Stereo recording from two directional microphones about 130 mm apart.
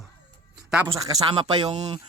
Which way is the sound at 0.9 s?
25° right (ahead or behind).